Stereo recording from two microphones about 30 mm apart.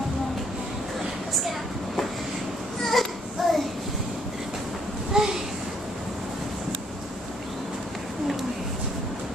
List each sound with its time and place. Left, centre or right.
2.8 s baby cry: centre
3.4 s child singing: centre
5.1 s a sound: centre